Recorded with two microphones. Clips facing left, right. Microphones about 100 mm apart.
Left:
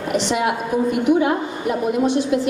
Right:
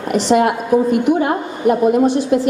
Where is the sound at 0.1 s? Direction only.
45° right (ahead or behind).